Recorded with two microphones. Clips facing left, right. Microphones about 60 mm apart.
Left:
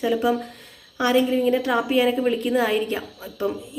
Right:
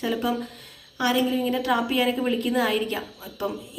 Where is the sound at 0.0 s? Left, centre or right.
Centre.